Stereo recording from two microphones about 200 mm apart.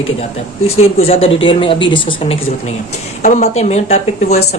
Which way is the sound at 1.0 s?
30° left (ahead or behind).